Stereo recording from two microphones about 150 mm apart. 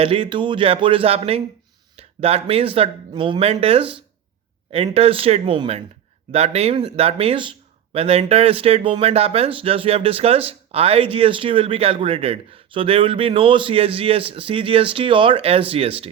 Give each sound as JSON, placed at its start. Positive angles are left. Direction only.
{"t": 0.0, "sound": "speech", "side_deg": -35}